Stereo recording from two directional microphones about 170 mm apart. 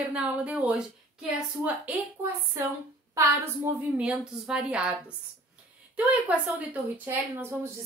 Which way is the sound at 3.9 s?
5° right (ahead or behind).